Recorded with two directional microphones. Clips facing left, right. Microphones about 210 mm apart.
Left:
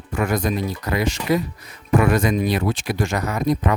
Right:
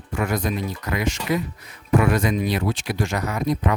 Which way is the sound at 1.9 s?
45° left (ahead or behind).